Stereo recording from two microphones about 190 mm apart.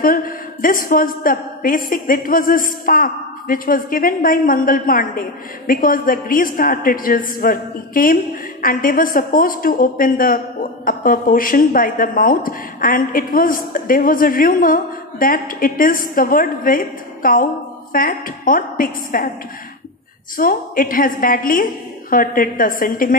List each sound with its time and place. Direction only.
0.0 s a woman's voice: 50° left (ahead or behind)
20.3 s a woman's voice: 50° left (ahead or behind)